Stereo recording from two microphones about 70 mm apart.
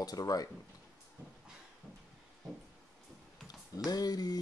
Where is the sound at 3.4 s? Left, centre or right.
Left.